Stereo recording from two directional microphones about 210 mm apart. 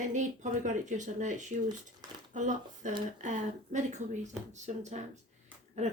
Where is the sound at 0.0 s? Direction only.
35° right (ahead or behind).